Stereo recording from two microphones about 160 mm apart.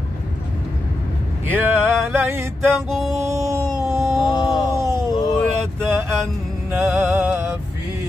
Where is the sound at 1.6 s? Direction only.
15° right (ahead or behind).